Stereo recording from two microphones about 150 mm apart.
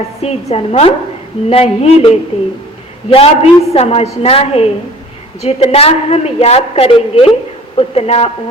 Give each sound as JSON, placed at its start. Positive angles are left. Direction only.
{"t": 0.2, "sound": "a woman's voice", "side_deg": 45}